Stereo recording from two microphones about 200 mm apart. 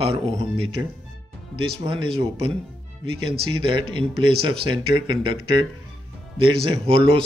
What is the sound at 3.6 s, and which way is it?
Speech, 25° right (ahead or behind).